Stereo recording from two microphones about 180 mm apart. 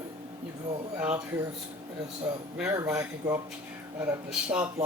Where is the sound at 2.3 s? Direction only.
10° right (ahead or behind).